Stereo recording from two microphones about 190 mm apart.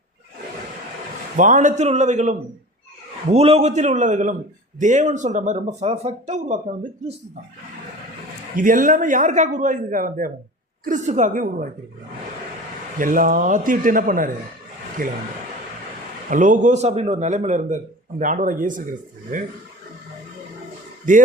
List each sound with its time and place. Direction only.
1.4 s speech: 40° right (ahead or behind)
8.5 s a man's voice: 45° right (ahead or behind)
13.0 s a man's voice: 45° right (ahead or behind)
16.3 s a man's voice: 40° right (ahead or behind)